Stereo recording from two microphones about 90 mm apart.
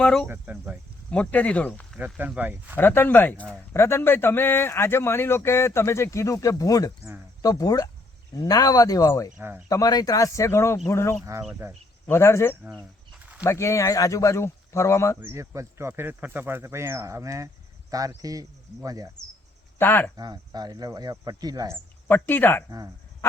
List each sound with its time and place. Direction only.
0.0 s speech: 10° left (ahead or behind)
0.3 s speech: 20° right (ahead or behind)
1.1 s speech: 15° left (ahead or behind)
2.0 s speech: 20° right (ahead or behind)
2.7 s a man's voice: 25° left (ahead or behind)
3.7 s a man's voice: 30° left (ahead or behind)
9.4 s speech: 20° right (ahead or behind)
9.6 s a man's voice: 40° left (ahead or behind)
11.6 s speech: 25° right (ahead or behind)
12.0 s a man's voice: 30° left (ahead or behind)
15.2 s speech: 35° right (ahead or behind)
19.8 s a man's voice: 25° left (ahead or behind)
20.1 s speech: 50° right (ahead or behind)
22.0 s a man's voice: 20° left (ahead or behind)